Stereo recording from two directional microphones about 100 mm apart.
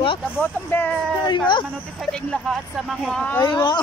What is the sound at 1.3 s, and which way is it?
Speech, 50° left (ahead or behind).